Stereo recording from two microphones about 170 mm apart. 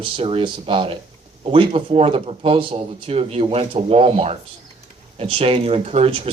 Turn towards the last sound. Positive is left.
turn(degrees=-35)  # may be behind; listen again after turning